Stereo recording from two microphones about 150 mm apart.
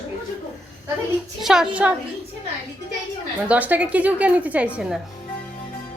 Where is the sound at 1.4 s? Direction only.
5° right (ahead or behind).